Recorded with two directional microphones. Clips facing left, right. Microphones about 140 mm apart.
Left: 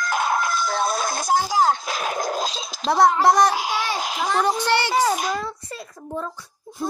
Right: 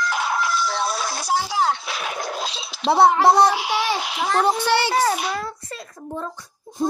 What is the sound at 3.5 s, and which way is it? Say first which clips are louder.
Speech: right 2 dB; 40° left (ahead or behind).